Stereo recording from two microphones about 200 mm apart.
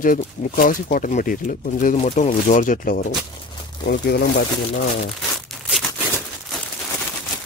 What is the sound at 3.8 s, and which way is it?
Speech, 55° left (ahead or behind).